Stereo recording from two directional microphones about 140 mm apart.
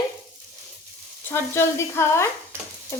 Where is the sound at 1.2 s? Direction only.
15° left (ahead or behind).